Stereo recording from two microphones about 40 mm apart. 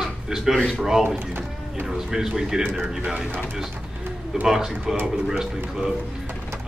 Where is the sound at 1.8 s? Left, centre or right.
Centre.